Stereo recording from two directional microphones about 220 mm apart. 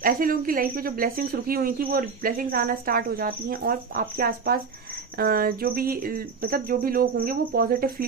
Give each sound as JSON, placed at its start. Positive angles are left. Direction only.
{"t": 0.0, "sound": "speech", "side_deg": -40}